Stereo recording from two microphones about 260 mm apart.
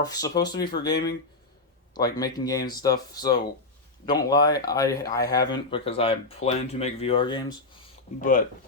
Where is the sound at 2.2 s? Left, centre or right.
Centre.